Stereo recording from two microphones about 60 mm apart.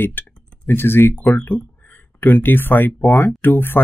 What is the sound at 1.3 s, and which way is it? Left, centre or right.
Speech, left.